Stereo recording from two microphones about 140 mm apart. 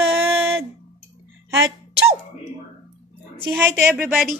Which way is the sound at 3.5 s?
10° right (ahead or behind).